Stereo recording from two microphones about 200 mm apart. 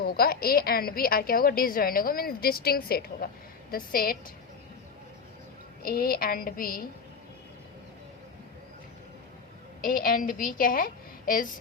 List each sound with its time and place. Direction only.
0.0 s a woman's voice: 50° left (ahead or behind)
5.8 s a woman's voice: 45° left (ahead or behind)
9.8 s a woman's voice: 45° left (ahead or behind)